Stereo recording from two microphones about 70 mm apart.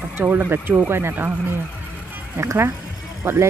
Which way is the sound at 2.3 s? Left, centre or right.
Right.